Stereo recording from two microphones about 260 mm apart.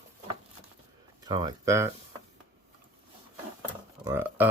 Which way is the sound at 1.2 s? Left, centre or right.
Centre.